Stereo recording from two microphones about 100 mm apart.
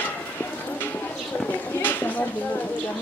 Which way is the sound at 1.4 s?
15° left (ahead or behind).